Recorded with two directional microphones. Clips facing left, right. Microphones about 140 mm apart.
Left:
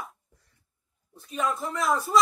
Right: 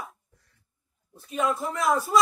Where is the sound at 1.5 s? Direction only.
Centre (ahead or behind).